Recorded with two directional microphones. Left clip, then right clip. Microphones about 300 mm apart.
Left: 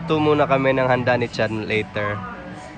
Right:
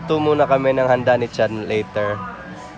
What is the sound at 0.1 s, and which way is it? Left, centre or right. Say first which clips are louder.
Speech: right 2 dB; centre.